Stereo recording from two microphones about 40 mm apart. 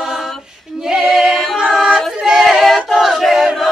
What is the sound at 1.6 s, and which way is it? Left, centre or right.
Singing, centre.